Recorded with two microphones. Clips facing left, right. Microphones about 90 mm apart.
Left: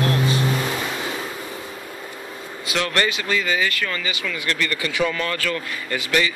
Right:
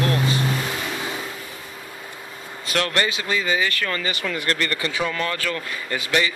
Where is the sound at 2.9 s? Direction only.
25° right (ahead or behind).